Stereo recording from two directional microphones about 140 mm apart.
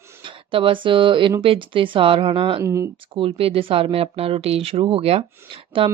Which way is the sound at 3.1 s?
40° right (ahead or behind).